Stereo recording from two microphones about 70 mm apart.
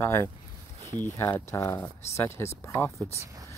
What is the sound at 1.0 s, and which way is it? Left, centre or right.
Speech, left.